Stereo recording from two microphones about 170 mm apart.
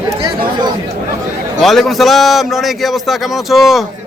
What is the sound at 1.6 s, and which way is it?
A man's voice, centre (ahead or behind).